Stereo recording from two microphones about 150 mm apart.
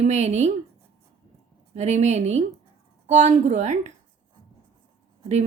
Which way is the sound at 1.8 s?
50° right (ahead or behind).